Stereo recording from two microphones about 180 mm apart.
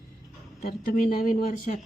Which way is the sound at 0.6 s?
50° left (ahead or behind).